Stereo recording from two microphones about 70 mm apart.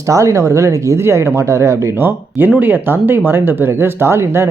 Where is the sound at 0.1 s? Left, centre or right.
Right.